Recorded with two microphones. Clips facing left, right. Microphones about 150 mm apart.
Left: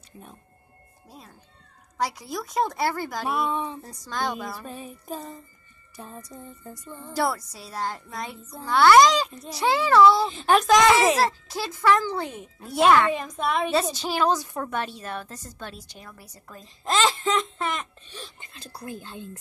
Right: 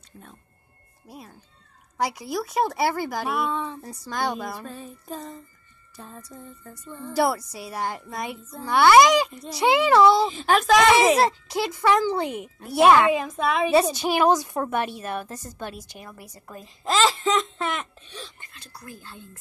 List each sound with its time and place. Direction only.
1.0 s a woman's voice: 10° right (ahead or behind)
3.4 s a sound: 15° left (ahead or behind)
3.8 s a woman's voice: 10° right (ahead or behind)
4.6 s a sound: 15° left (ahead or behind)
7.2 s a woman's voice: 10° right (ahead or behind)
10.3 s a woman's voice: centre (ahead or behind)
16.8 s wail: centre (ahead or behind)
18.4 s speech: 30° left (ahead or behind)